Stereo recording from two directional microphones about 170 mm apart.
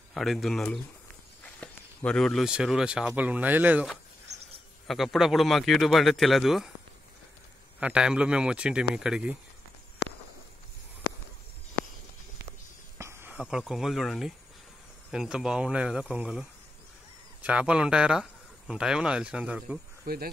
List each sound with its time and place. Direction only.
0.1 s speech: centre (ahead or behind)
4.8 s speech: centre (ahead or behind)
7.8 s speech: 5° right (ahead or behind)
10.0 s walk: 70° left (ahead or behind)
12.9 s speech: 15° right (ahead or behind)
20.1 s speech: 60° right (ahead or behind)